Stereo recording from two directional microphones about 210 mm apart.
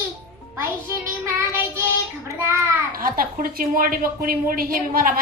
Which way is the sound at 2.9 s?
45° right (ahead or behind).